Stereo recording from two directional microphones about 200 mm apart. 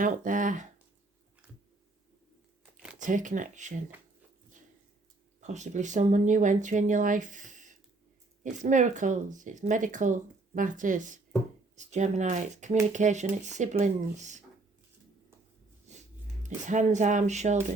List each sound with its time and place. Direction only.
0.0 s speech: 40° right (ahead or behind)
3.0 s speech: 40° right (ahead or behind)
5.4 s speech: 35° right (ahead or behind)
15.9 s a sound: 35° right (ahead or behind)
16.6 s speech: 35° right (ahead or behind)